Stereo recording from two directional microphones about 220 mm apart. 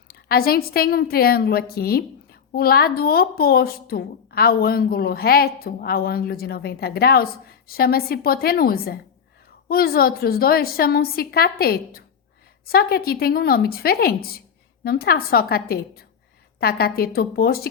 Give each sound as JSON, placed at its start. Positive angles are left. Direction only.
{"t": 0.1, "sound": "a woman's voice", "side_deg": 45}